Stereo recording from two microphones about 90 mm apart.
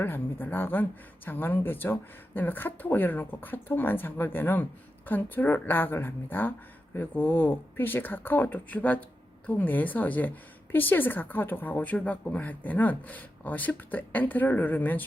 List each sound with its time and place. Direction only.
0.0 s speech: 20° left (ahead or behind)